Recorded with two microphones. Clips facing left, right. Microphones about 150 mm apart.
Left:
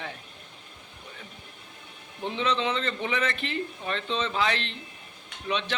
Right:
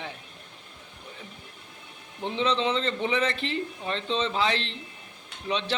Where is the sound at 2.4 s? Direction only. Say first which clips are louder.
Right 2 dB; 30° right (ahead or behind).